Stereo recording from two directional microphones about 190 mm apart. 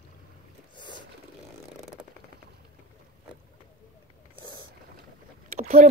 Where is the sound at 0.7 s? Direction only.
25° left (ahead or behind).